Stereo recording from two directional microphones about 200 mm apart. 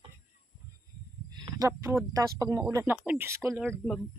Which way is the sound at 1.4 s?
20° right (ahead or behind).